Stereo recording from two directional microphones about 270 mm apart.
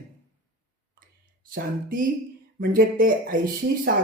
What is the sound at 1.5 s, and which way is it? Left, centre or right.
Speech, right.